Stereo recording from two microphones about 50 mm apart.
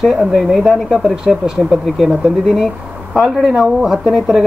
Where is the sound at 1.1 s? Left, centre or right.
Centre.